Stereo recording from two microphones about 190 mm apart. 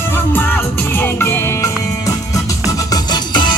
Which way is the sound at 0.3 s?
10° left (ahead or behind).